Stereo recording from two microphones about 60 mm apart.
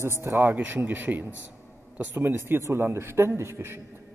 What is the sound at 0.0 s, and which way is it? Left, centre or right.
Speech, right.